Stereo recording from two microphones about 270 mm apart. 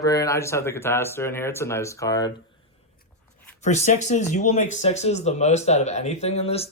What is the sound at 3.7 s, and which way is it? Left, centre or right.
Speech, left.